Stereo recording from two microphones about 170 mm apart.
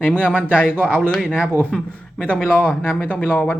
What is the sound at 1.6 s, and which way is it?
A man's voice, 5° left (ahead or behind).